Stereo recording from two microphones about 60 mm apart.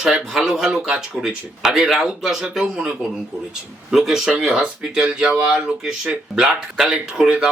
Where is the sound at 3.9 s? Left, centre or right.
Centre.